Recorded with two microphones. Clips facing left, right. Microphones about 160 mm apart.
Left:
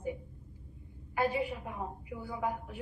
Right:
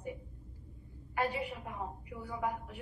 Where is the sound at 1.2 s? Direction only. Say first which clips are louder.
Left 4 dB; 20° left (ahead or behind).